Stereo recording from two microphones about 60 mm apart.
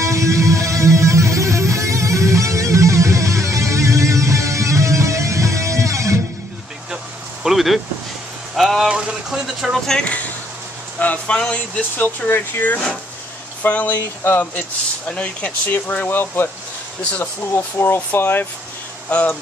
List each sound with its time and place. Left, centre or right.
0.0 s music: right
7.4 s a sound: centre
8.8 s vehicle: centre
9.6 s speech: centre
11.0 s speech: left
12.3 s speech: left
15.0 s speech: centre; by 18.5 s left
19.0 s speech: left